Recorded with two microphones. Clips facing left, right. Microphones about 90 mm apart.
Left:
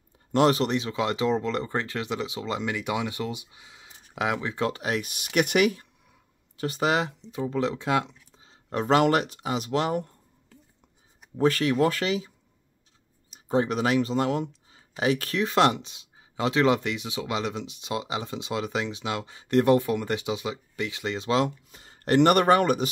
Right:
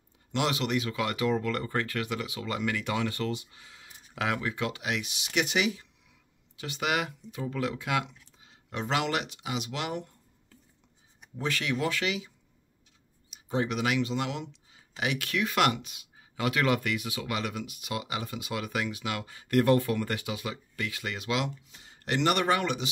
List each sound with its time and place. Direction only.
0.3 s speech: 40° left (ahead or behind); by 4.6 s 25° left (ahead or behind)
4.6 s speech: 40° left (ahead or behind)
11.3 s speech: 40° left (ahead or behind)
13.3 s speech: 35° left (ahead or behind)
21.6 s speech: 45° left (ahead or behind)